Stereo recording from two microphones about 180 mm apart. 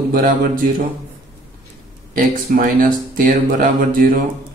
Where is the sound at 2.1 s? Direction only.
50° right (ahead or behind).